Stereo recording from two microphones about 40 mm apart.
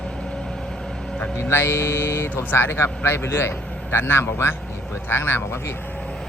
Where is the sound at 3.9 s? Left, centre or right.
Left.